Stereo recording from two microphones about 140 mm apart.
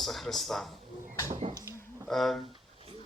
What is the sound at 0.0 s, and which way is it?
Speech, centre (ahead or behind).